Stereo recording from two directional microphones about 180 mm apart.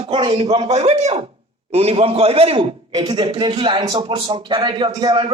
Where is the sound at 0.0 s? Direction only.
25° right (ahead or behind).